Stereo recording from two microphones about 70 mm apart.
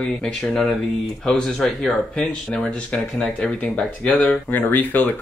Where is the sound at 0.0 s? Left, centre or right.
Centre.